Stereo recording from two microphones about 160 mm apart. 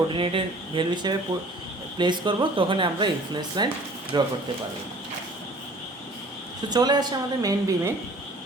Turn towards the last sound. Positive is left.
turn(degrees=-20)  # may be behind; listen again after turning